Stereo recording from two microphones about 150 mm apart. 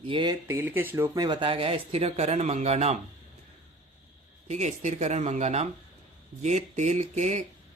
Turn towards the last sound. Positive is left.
turn(degrees=-50)  # may be behind; listen again after turning